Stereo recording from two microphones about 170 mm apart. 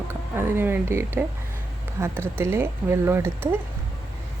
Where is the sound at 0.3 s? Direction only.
15° right (ahead or behind).